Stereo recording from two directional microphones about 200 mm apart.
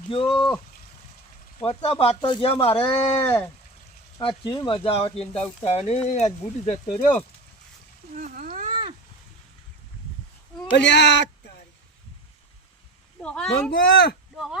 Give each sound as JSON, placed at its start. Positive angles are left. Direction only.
{"t": 0.1, "sound": "speech", "side_deg": 25}
{"t": 1.6, "sound": "speech", "side_deg": 25}
{"t": 3.2, "sound": "speech", "side_deg": 10}
{"t": 4.2, "sound": "speech", "side_deg": 25}
{"t": 8.1, "sound": "a sound", "side_deg": -40}
{"t": 10.8, "sound": "speech", "side_deg": 60}
{"t": 13.5, "sound": "speech", "side_deg": 50}
{"t": 14.3, "sound": "speech", "side_deg": 0}